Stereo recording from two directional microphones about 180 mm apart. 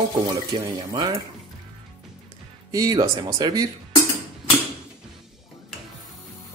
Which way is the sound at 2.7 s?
20° right (ahead or behind).